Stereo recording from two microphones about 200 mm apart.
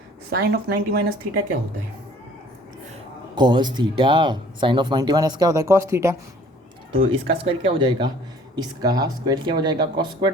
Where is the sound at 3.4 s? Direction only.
20° right (ahead or behind).